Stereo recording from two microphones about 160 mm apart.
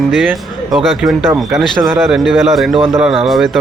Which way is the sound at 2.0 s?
Centre (ahead or behind).